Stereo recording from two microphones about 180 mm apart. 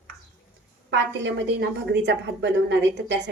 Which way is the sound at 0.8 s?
85° right.